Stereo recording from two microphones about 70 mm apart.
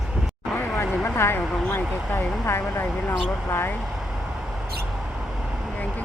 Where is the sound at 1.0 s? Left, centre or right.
Left.